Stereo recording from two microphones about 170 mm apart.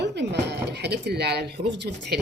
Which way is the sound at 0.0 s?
85° right.